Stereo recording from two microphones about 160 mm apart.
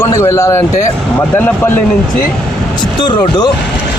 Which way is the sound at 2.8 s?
30° left (ahead or behind).